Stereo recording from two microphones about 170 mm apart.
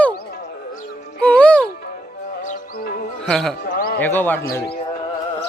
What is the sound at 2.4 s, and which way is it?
Music, 60° left (ahead or behind).